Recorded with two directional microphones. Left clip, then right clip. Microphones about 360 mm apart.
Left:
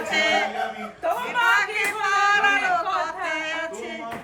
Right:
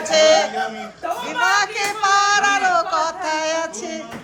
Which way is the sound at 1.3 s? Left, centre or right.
Centre.